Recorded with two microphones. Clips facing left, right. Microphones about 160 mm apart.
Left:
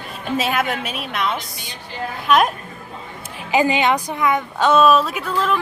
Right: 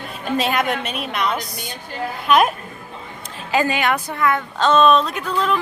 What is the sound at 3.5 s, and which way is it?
A woman's voice, 20° left (ahead or behind).